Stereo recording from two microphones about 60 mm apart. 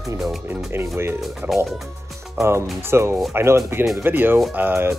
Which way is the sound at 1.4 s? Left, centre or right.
Right.